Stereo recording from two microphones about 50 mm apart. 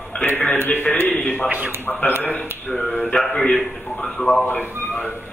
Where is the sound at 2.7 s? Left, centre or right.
Centre.